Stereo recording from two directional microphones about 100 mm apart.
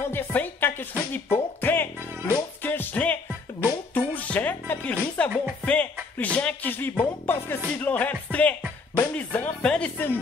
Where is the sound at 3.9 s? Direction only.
20° left (ahead or behind).